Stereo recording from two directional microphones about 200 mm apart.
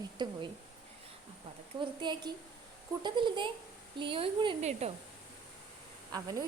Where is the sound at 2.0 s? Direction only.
20° right (ahead or behind).